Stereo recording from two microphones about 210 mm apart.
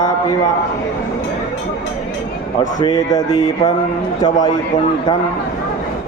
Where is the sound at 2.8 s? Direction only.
20° left (ahead or behind).